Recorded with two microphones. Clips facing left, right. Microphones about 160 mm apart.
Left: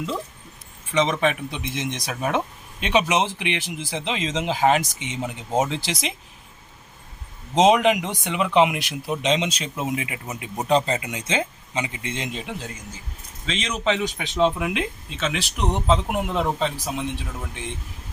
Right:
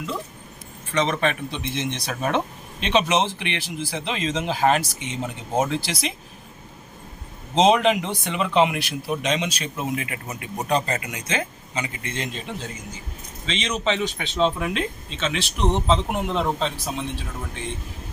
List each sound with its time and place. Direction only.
0.9 s speech: 15° left (ahead or behind)
7.5 s speech: 15° left (ahead or behind)